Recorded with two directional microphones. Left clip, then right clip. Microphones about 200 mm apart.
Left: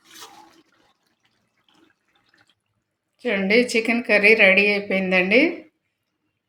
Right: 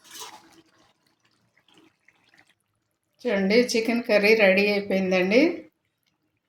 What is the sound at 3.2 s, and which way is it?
A woman's voice, 5° right (ahead or behind).